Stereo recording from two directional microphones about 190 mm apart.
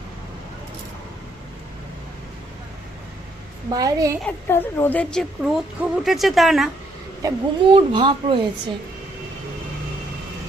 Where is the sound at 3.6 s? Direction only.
20° right (ahead or behind).